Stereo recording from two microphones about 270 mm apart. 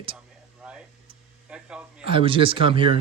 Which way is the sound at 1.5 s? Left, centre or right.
Centre.